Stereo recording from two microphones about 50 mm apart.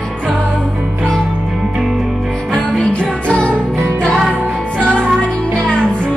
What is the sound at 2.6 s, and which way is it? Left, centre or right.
Music, left.